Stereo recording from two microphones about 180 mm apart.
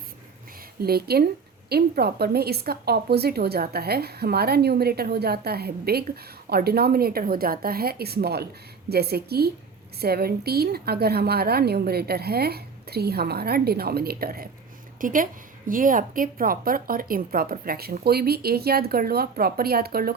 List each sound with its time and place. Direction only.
0.8 s a woman's voice: 60° right (ahead or behind)